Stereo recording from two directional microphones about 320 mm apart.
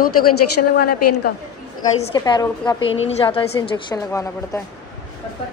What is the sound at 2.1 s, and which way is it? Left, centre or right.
A woman's voice, centre.